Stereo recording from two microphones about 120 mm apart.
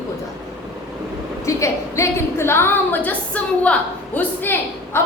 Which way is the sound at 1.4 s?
25° left (ahead or behind).